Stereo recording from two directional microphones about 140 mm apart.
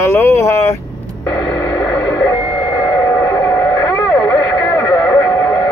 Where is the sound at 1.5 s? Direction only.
10° left (ahead or behind).